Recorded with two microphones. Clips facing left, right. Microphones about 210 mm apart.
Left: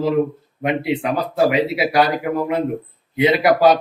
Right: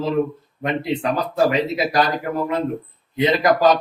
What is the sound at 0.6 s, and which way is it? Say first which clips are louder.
Speech: left 3 dB; 10° left (ahead or behind).